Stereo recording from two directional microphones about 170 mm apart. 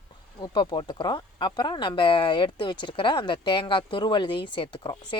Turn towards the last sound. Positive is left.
turn(degrees=30)  # may be behind; listen again after turning